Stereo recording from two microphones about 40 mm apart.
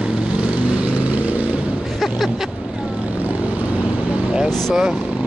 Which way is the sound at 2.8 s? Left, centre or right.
Right.